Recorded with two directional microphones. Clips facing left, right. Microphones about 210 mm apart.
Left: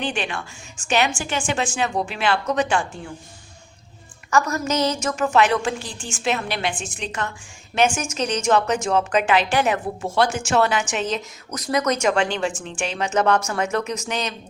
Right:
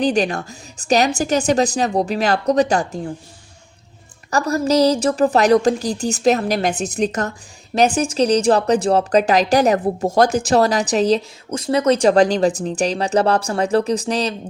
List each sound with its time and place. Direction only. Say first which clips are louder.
0.0 s a woman's voice: right 9 dB; 40° right (ahead or behind)
4.3 s a woman's voice: right 4 dB; 35° right (ahead or behind)